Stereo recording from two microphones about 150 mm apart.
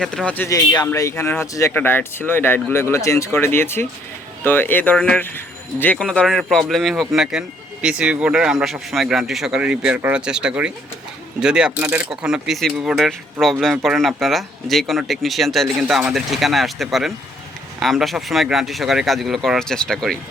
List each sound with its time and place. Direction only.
0.0 s speech: 5° left (ahead or behind)